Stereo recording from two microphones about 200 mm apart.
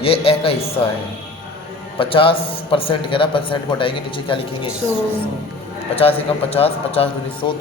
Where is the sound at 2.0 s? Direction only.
25° left (ahead or behind).